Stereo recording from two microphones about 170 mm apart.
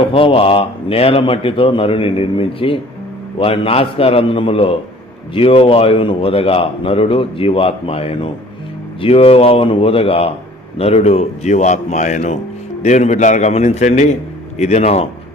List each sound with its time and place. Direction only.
0.1 s a man's voice: 35° left (ahead or behind)